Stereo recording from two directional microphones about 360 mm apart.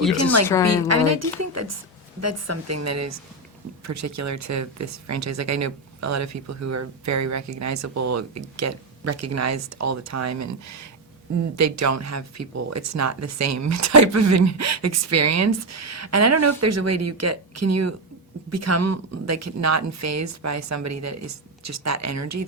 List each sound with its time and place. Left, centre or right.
0.4 s a woman's voice: centre
0.9 s speech: right